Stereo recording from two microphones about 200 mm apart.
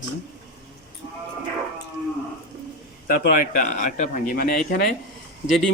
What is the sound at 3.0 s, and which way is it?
A man's voice, 40° left (ahead or behind).